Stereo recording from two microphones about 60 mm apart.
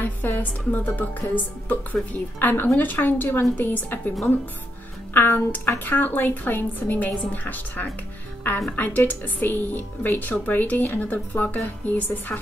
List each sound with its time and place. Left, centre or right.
0.0 s speech: left
5.1 s a woman's voice: left